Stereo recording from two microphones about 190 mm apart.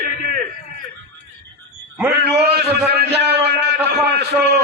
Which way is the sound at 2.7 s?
60° right (ahead or behind).